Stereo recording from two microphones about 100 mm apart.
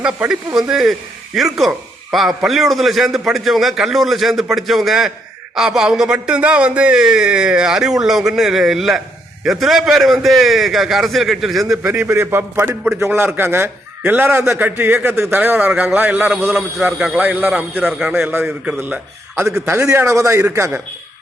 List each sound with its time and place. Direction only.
0.0 s a man's voice: 5° right (ahead or behind)
11.9 s a man's voice: 25° right (ahead or behind)
19.6 s a man's voice: 30° right (ahead or behind)